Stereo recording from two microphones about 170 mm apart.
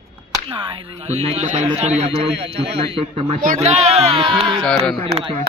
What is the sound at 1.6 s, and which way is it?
Speech, 40° right (ahead or behind).